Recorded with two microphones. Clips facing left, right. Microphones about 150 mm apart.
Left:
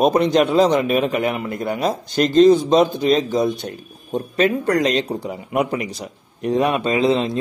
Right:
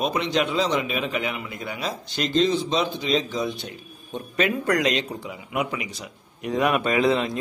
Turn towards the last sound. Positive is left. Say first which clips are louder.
# left 4 dB
turn(degrees=25)  # may be behind; listen again after turning